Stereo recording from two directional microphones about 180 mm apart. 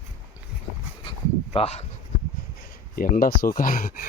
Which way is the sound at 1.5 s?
35° left (ahead or behind).